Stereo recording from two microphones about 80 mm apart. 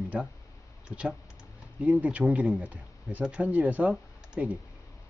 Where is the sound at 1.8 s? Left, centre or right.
Centre.